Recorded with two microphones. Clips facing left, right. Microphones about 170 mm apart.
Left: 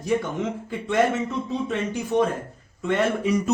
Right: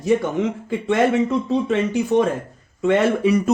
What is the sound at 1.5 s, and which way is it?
Speech, 85° right.